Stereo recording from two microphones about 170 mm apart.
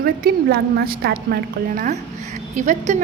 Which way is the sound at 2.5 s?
45° right (ahead or behind).